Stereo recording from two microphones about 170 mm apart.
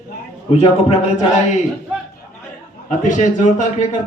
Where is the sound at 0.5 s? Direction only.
35° left (ahead or behind).